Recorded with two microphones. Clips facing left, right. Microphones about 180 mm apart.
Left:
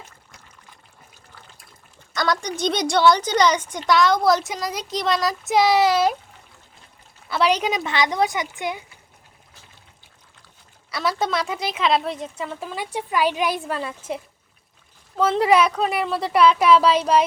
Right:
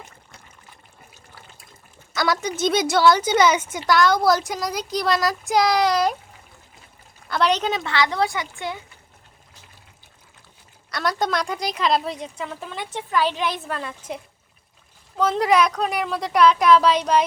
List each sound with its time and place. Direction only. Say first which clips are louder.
2.1 s a woman's voice: right 1 dB; 5° right (ahead or behind)
7.3 s speech: left 1 dB; 5° left (ahead or behind)
10.9 s a woman's voice: even; 5° left (ahead or behind)